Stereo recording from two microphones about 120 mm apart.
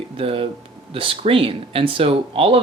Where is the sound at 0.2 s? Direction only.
50° right (ahead or behind).